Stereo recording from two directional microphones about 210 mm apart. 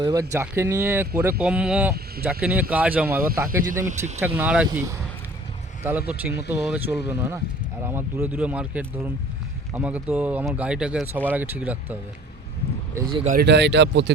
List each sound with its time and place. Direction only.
0.0 s speech: 15° right (ahead or behind)
3.8 s speech: 35° right (ahead or behind)
4.4 s speech: 5° right (ahead or behind)
12.9 s speech: 20° right (ahead or behind)
13.2 s speech: 45° right (ahead or behind)